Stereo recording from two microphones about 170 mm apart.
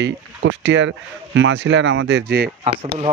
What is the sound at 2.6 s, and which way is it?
Speech, 35° right (ahead or behind).